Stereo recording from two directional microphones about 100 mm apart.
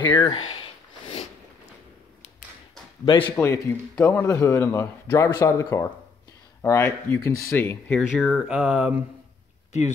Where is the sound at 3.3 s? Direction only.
25° left (ahead or behind).